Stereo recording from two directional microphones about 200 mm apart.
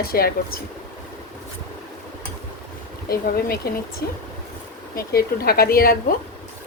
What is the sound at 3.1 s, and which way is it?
Speech, 50° left (ahead or behind).